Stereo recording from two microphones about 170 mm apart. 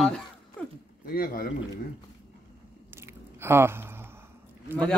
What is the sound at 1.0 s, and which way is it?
Speech, 60° left (ahead or behind).